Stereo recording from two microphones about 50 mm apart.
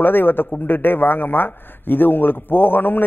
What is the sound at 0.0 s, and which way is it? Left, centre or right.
A man's voice, left.